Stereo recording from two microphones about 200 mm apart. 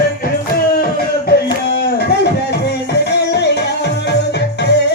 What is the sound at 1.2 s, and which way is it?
Music, 55° left (ahead or behind).